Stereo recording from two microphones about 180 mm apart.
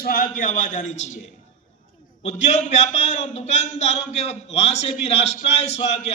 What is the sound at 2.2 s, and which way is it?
A man's voice, 40° left (ahead or behind).